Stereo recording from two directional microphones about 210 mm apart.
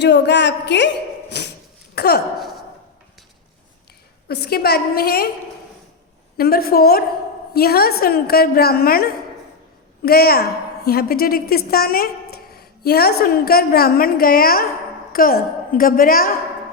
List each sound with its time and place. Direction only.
0.0 s a woman's voice: 55° left (ahead or behind)
1.3 s a sound: 50° left (ahead or behind)
2.0 s a woman's voice: 50° left (ahead or behind)
4.3 s a woman's voice: 50° left (ahead or behind)
6.3 s a woman's voice: 45° left (ahead or behind)